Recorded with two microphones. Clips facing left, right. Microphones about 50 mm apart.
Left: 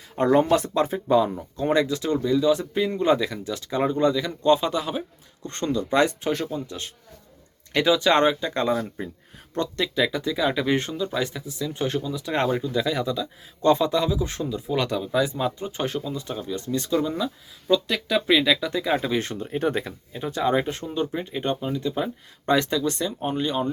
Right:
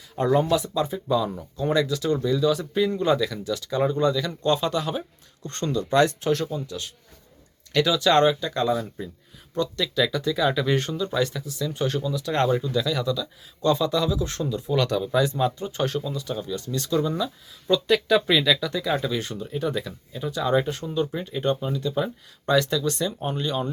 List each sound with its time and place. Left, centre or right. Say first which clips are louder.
0.2 s speech: left 2 dB; left
0.5 s speech: left 2 dB; left
2.0 s speech: left 2 dB; centre
17.0 s speech: even; centre
17.8 s speech: right 4 dB; centre
18.3 s speech: left 1 dB; centre
19.1 s speech: left 3 dB; left
20.8 s speech: even; centre
22.4 s speech: even; left
22.9 s speech: even; centre